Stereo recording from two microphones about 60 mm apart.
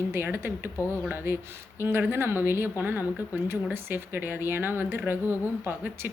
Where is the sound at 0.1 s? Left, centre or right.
Right.